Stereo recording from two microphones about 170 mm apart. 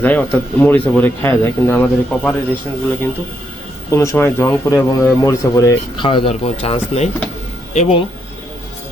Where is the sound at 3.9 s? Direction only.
15° left (ahead or behind).